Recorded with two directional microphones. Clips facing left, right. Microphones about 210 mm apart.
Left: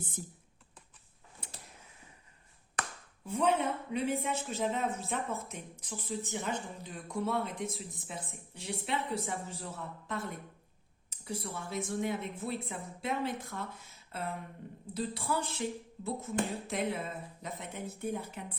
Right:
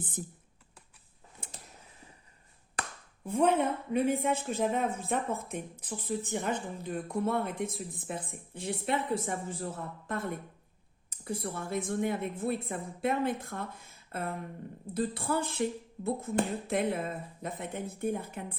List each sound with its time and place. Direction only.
3.2 s speech: 55° right (ahead or behind)